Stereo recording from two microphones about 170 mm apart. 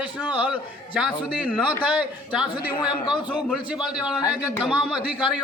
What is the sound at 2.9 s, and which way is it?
Speech, 25° left (ahead or behind).